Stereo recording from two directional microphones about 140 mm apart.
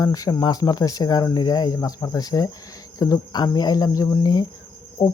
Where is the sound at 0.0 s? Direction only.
25° left (ahead or behind).